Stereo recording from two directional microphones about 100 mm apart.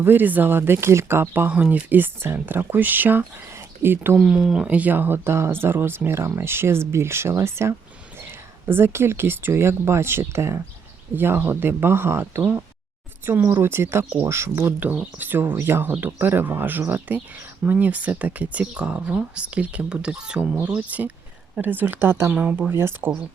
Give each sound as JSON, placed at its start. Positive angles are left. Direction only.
{"t": 0.0, "sound": "speech", "side_deg": -20}
{"t": 4.2, "sound": "speech", "side_deg": -5}